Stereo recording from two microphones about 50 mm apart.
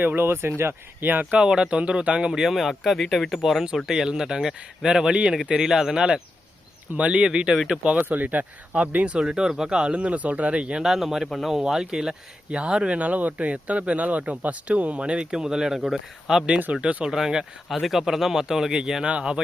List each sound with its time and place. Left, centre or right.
0.0 s speech: right
1.0 s speech: right
1.4 s speech: centre
1.7 s speech: right
2.6 s speech: centre
6.9 s speech: right
7.3 s speech: centre
9.1 s speech: centre
10.8 s speech: centre
11.6 s speech: centre
16.8 s speech: centre
17.1 s speech: centre